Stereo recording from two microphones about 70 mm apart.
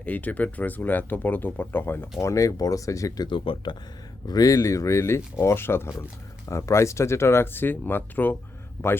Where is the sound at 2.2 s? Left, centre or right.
Left.